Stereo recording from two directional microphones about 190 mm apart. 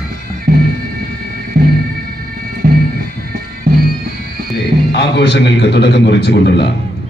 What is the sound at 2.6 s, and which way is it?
Music, 55° right (ahead or behind).